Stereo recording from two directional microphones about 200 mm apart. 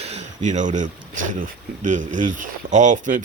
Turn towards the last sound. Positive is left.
turn(degrees=-40)  # may be behind; listen again after turning